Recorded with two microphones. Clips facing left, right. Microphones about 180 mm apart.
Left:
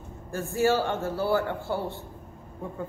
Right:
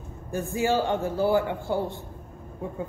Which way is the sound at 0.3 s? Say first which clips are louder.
Left 1 dB; 15° right (ahead or behind).